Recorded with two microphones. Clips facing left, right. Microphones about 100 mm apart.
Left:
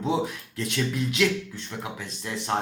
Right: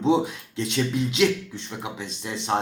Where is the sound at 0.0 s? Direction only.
25° right (ahead or behind).